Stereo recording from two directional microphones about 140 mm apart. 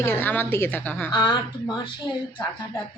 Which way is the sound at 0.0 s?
15° left (ahead or behind).